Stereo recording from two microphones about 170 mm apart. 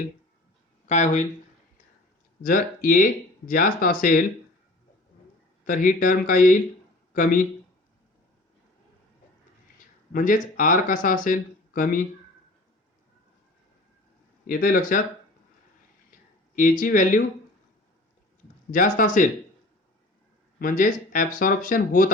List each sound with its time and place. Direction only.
0.9 s speech: 45° left (ahead or behind)
2.4 s speech: 55° left (ahead or behind)
5.6 s speech: 50° left (ahead or behind)
10.1 s speech: 55° left (ahead or behind)
14.4 s speech: 60° left (ahead or behind)
16.6 s speech: 50° left (ahead or behind)
18.7 s speech: 50° left (ahead or behind)
20.6 s speech: 55° left (ahead or behind)